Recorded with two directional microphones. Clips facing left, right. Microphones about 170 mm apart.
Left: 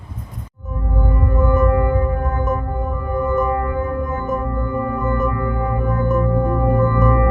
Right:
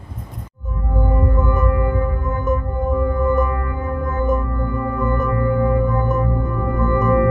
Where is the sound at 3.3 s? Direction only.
25° left (ahead or behind).